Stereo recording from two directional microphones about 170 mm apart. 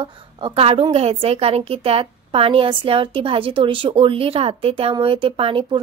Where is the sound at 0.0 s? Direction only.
35° right (ahead or behind).